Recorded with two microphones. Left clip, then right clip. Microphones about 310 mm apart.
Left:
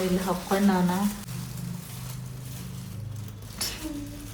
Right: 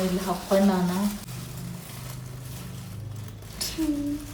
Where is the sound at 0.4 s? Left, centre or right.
Centre.